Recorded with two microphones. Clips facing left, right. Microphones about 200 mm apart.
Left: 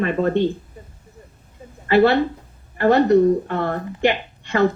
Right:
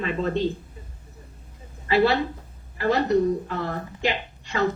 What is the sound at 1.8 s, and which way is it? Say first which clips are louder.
A woman's voice: left 5 dB; 60° left (ahead or behind).